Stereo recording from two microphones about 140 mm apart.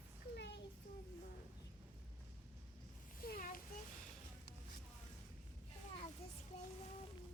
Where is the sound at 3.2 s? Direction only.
90° left.